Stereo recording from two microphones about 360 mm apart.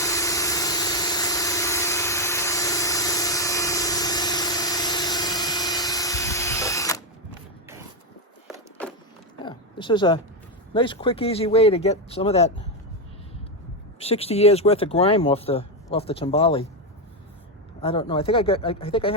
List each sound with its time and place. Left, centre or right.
0.0 s vehicle: centre
9.4 s oink: centre
10.8 s speech: centre
14.0 s speech: centre
17.7 s speech: centre